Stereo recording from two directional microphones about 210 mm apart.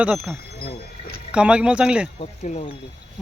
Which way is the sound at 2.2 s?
30° left (ahead or behind).